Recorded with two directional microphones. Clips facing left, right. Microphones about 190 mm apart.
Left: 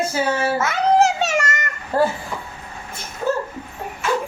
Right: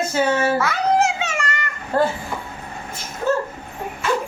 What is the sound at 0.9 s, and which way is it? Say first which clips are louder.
Music: left 3 dB; 40° left (ahead or behind).